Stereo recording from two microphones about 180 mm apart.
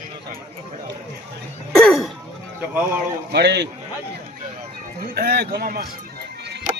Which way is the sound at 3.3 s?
70° right (ahead or behind).